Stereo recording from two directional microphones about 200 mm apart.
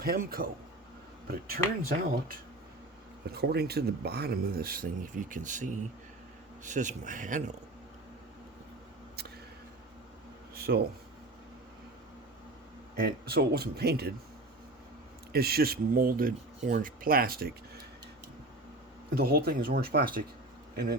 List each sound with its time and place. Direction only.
0.0 s speech: 50° right (ahead or behind)
3.2 s speech: 50° right (ahead or behind)
6.7 s speech: 40° right (ahead or behind)
10.5 s a sound: 50° right (ahead or behind)
13.0 s speech: 50° right (ahead or behind)
15.3 s speech: 50° right (ahead or behind)
19.1 s speech: 50° right (ahead or behind)